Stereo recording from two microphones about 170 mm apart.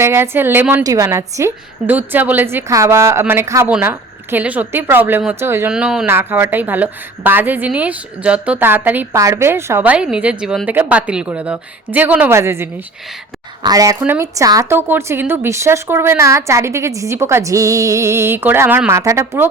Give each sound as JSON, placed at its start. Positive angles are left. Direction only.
{"t": 0.0, "sound": "a woman's voice", "side_deg": -15}